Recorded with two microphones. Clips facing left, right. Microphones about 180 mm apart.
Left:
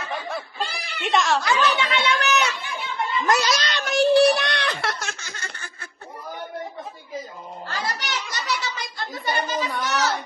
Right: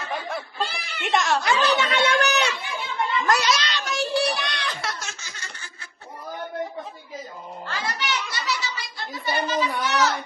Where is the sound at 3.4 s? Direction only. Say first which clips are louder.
Even; 40° left (ahead or behind); by 5.7 s 55° left (ahead or behind).